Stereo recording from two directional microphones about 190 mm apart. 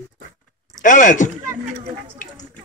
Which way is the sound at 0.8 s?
40° left (ahead or behind).